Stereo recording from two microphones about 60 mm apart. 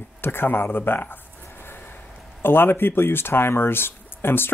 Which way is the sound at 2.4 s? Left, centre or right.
Left.